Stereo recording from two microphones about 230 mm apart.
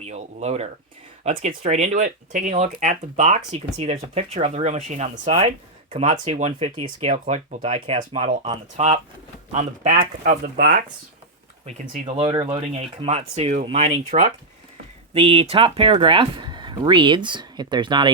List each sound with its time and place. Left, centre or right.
0.0 s speech: right
11.6 s speech: right